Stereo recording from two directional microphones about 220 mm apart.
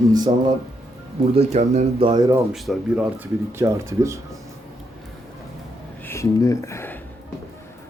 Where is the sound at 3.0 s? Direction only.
10° right (ahead or behind).